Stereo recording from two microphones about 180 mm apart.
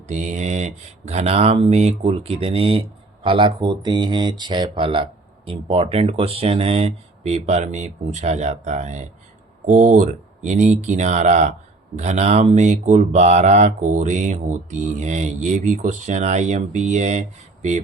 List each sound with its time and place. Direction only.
0.1 s speech: 40° right (ahead or behind)